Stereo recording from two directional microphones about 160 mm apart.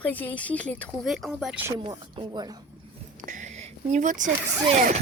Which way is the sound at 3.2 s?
55° right (ahead or behind).